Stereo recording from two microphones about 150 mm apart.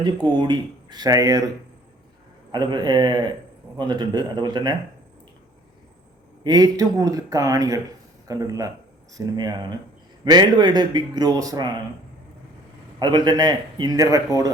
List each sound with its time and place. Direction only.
0.3 s speech: 30° right (ahead or behind)
2.5 s speech: 30° right (ahead or behind)
6.4 s speech: 25° right (ahead or behind)
13.0 s speech: 30° right (ahead or behind)